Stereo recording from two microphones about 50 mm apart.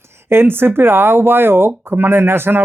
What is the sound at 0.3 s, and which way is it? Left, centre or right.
Speech, right.